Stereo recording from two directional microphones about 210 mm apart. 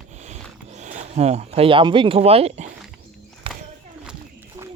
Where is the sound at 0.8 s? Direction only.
35° right (ahead or behind).